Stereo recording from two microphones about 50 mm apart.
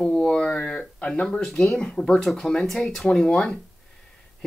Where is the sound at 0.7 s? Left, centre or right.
Left.